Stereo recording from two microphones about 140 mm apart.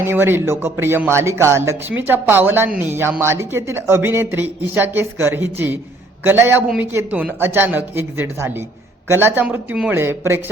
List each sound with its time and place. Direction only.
0.0 s a man's voice: 15° right (ahead or behind)